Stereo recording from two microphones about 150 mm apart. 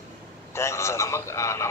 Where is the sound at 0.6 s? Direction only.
20° left (ahead or behind).